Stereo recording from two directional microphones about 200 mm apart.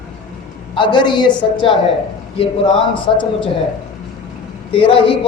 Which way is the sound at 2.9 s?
25° left (ahead or behind).